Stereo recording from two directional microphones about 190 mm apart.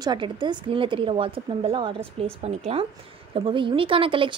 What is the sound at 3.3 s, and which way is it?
Speech, 25° right (ahead or behind).